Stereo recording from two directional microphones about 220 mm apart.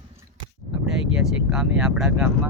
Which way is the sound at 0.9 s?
5° right (ahead or behind).